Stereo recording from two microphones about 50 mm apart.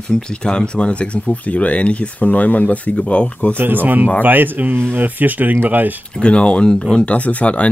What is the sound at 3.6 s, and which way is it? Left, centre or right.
Speech, right.